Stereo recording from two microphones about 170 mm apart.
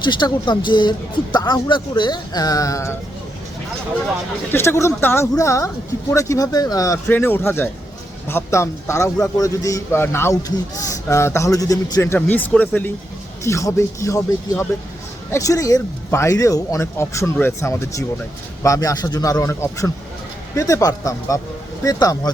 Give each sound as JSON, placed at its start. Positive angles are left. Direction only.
{"t": 0.0, "sound": "speech", "side_deg": 25}
{"t": 4.5, "sound": "speech", "side_deg": 15}